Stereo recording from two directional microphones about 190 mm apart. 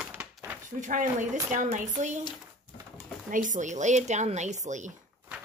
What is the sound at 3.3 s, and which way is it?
Speech, 40° right (ahead or behind).